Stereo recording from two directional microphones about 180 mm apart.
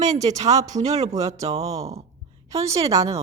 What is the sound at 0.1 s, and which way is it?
Speech, 20° right (ahead or behind).